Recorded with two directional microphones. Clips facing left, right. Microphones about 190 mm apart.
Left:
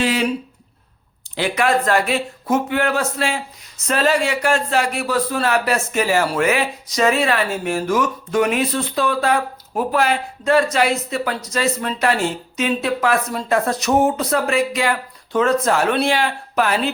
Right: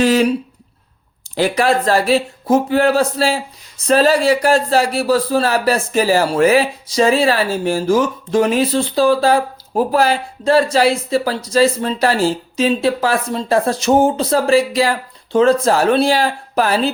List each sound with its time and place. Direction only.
0.0 s speech: 40° right (ahead or behind)
1.4 s a man's voice: 35° right (ahead or behind)